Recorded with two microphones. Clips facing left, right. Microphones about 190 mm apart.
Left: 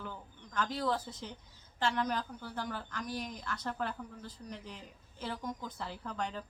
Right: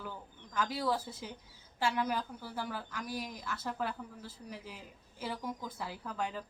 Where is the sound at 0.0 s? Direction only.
10° right (ahead or behind).